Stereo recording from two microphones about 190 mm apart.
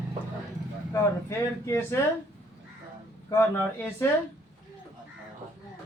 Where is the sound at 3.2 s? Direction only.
10° left (ahead or behind).